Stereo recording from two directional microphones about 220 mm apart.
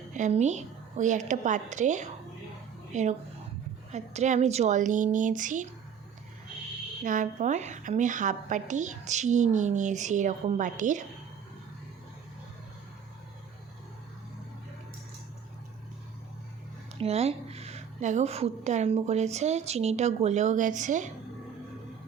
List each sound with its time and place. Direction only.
0.1 s a woman's voice: 30° right (ahead or behind)
7.0 s a woman's voice: 35° right (ahead or behind)
17.0 s a woman's voice: 30° right (ahead or behind)